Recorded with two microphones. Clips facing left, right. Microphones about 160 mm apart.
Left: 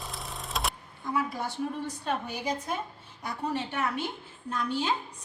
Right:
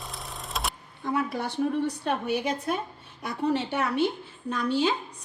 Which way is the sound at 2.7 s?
65° right (ahead or behind).